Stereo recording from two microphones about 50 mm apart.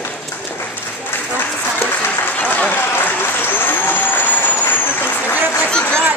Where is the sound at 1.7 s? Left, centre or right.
Left.